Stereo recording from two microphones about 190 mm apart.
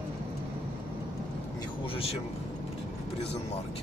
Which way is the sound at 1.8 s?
30° left (ahead or behind).